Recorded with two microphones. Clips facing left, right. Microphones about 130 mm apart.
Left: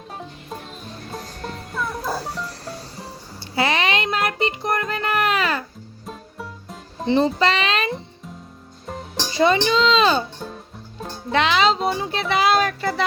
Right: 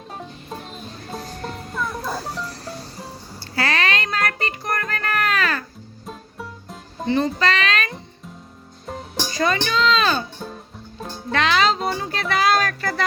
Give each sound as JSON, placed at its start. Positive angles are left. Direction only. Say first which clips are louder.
{"t": 1.7, "sound": "music", "louder": "left 1 dB", "side_deg": 5}
{"t": 3.5, "sound": "music", "louder": "left 2 dB", "side_deg": 20}
{"t": 6.1, "sound": "music", "louder": "even", "side_deg": 0}
{"t": 7.0, "sound": "a child's voice", "louder": "left 2 dB", "side_deg": 25}
{"t": 9.3, "sound": "speech", "louder": "left 4 dB", "side_deg": 25}
{"t": 11.3, "sound": "speech", "louder": "left 1 dB", "side_deg": 20}
{"t": 11.9, "sound": "music", "louder": "left 2 dB", "side_deg": 15}